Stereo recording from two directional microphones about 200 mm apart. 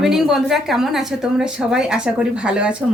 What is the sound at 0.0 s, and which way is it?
Speech, centre (ahead or behind).